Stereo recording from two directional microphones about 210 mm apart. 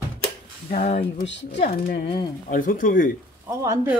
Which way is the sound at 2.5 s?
40° left (ahead or behind).